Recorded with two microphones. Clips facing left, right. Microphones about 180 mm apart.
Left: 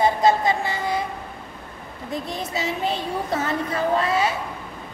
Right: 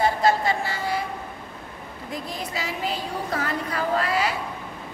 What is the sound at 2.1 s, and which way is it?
Speech, 25° left (ahead or behind).